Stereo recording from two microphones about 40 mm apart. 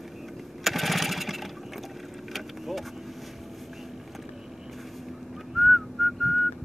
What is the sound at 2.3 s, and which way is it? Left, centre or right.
Vehicle, centre.